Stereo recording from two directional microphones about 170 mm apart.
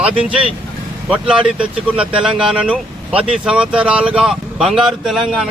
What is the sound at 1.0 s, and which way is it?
A man's voice, 5° right (ahead or behind).